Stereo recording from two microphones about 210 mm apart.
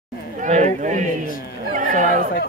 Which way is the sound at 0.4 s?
35° right (ahead or behind).